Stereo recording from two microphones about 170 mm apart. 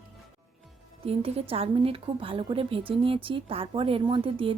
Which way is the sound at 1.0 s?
35° right (ahead or behind).